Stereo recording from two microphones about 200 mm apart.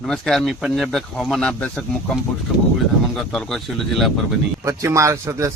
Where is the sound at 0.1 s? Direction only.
Centre (ahead or behind).